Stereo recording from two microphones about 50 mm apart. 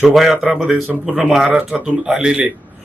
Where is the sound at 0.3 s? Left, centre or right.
Centre.